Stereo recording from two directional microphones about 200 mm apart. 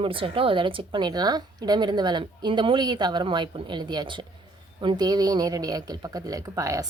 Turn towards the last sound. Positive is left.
turn(degrees=-15)  # may be behind; listen again after turning